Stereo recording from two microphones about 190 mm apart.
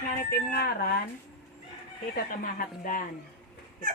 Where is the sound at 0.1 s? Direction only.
45° left (ahead or behind).